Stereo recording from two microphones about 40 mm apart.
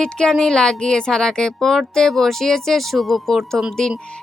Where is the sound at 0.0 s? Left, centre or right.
Centre.